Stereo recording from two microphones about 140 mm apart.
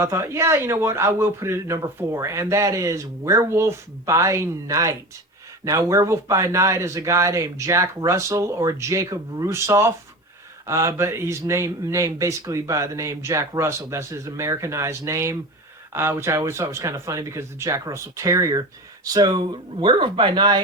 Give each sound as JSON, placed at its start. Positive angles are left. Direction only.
{"t": 0.0, "sound": "a man's voice", "side_deg": -20}